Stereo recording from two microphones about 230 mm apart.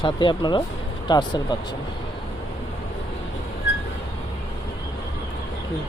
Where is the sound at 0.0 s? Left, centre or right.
Centre.